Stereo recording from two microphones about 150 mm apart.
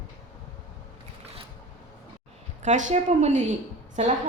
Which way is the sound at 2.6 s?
55° right (ahead or behind).